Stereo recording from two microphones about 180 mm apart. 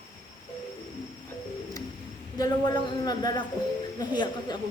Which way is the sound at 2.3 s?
20° left (ahead or behind).